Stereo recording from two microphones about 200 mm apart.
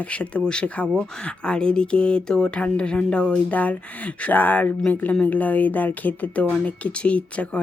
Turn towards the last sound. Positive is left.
turn(degrees=5)  # may be behind; listen again after turning